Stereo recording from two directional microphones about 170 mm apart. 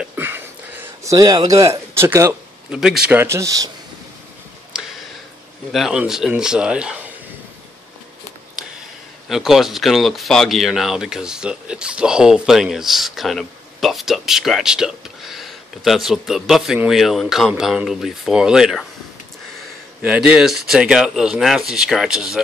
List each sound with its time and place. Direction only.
0.0 s a sound: 10° right (ahead or behind)
3.1 s a man's voice: 15° right (ahead or behind)
4.7 s a sound: 5° right (ahead or behind)
5.7 s speech: centre (ahead or behind)
9.3 s speech: centre (ahead or behind)
20.0 s speech: 10° right (ahead or behind)